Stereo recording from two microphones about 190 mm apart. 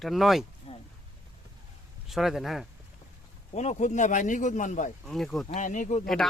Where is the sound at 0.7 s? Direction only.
30° left (ahead or behind).